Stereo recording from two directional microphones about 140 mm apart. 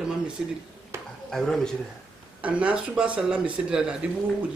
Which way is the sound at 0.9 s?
20° right (ahead or behind).